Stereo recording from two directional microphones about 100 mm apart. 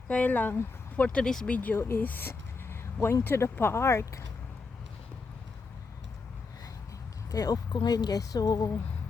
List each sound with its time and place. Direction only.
0.1 s speech: 15° left (ahead or behind)
1.5 s speech: 20° left (ahead or behind)
7.3 s a woman's voice: 40° left (ahead or behind)